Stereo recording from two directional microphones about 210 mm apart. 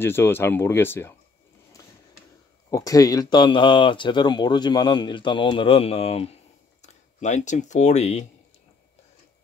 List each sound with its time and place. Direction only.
0.0 s speech: 10° left (ahead or behind)
2.7 s speech: 15° left (ahead or behind); by 8.3 s 30° left (ahead or behind)